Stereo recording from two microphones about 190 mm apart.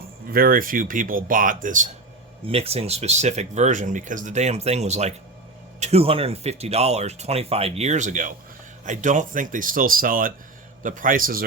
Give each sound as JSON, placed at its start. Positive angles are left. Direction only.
{"t": 0.3, "sound": "speech", "side_deg": -50}
{"t": 2.5, "sound": "speech", "side_deg": -30}